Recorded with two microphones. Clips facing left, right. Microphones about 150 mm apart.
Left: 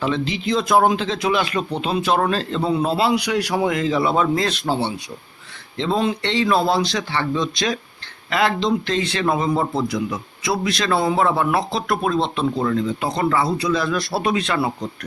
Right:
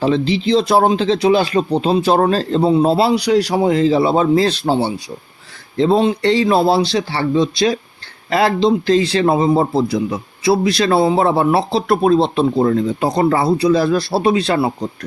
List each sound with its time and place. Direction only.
0.0 s a man's voice: 35° right (ahead or behind)